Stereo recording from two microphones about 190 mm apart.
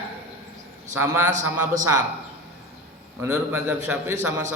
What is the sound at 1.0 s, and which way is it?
Speech, 10° right (ahead or behind).